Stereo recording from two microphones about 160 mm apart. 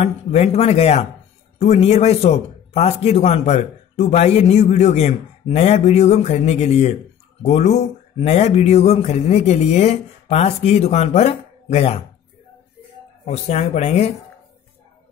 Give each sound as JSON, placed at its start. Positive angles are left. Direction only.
{"t": 0.0, "sound": "speech", "side_deg": 40}
{"t": 13.2, "sound": "speech", "side_deg": 40}